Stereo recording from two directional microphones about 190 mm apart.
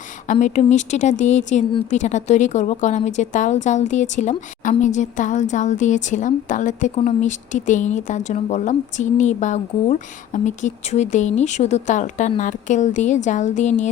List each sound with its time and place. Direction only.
0.3 s a woman's voice: 40° left (ahead or behind)